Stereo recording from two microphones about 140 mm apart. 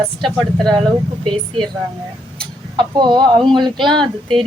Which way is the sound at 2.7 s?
30° right (ahead or behind).